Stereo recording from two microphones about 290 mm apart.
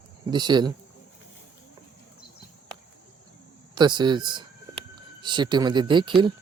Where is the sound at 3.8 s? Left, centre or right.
Centre.